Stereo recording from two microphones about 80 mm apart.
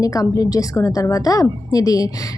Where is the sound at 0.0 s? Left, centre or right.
Left.